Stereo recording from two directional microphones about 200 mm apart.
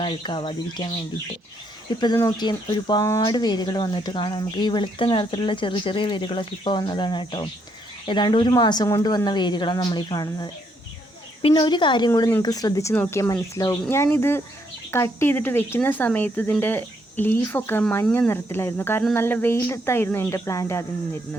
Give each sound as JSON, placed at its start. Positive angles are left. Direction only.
{"t": 0.0, "sound": "speech", "side_deg": 25}
{"t": 2.0, "sound": "speech", "side_deg": 20}